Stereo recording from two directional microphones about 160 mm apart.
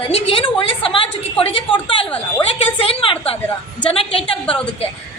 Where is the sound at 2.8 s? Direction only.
35° left (ahead or behind).